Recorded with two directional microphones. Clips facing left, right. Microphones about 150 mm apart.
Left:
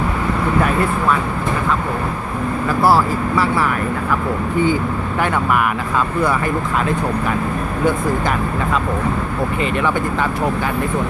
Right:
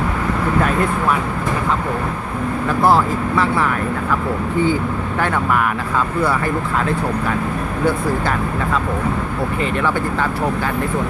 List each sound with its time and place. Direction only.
2.6 s speech: 5° left (ahead or behind)
5.2 s speech: 10° left (ahead or behind)